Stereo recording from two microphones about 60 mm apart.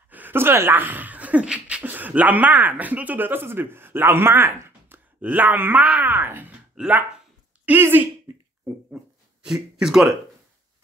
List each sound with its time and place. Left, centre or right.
0.1 s beatboxing: right
1.9 s speech: right
6.8 s speech: right
7.8 s speech: right
8.9 s a sound: centre